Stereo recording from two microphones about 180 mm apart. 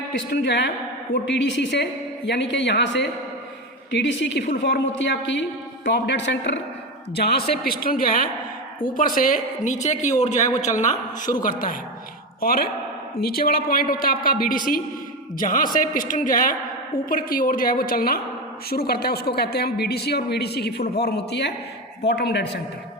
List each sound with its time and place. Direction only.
0.4 s a woman's voice: 70° left (ahead or behind)
1.1 s a woman's voice: 80° left
7.2 s a man's voice: 60° left (ahead or behind)